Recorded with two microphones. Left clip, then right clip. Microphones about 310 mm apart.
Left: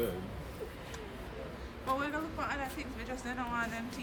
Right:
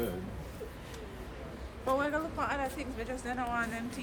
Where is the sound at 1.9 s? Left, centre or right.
Centre.